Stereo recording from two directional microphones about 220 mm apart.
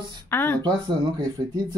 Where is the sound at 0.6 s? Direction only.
20° right (ahead or behind).